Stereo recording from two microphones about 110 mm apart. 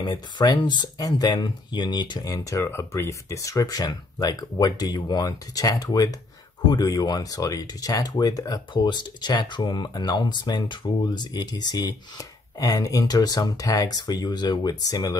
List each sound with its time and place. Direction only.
0.0 s speech: 40° left (ahead or behind)